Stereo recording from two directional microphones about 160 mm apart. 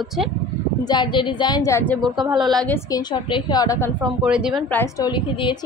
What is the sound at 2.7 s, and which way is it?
A woman's voice, 25° left (ahead or behind).